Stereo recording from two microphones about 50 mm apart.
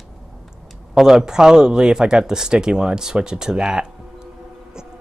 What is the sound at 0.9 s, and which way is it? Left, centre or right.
Speech, centre.